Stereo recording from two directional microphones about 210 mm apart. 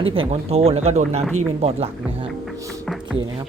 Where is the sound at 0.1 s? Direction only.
25° right (ahead or behind).